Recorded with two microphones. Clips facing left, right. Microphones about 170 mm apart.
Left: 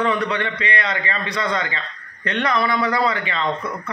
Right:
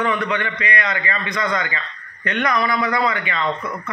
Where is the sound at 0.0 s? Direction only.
30° left (ahead or behind).